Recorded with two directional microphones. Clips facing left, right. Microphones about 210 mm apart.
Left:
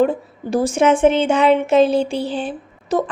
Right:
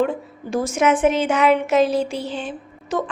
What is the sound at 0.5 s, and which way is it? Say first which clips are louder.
Speech: left 3 dB; 30° left (ahead or behind).